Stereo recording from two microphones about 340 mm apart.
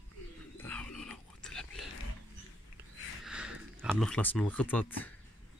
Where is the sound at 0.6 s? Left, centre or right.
Centre.